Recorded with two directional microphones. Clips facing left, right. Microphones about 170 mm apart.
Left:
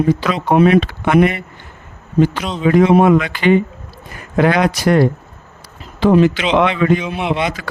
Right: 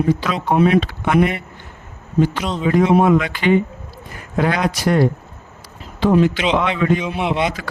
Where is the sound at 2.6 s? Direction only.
75° left (ahead or behind).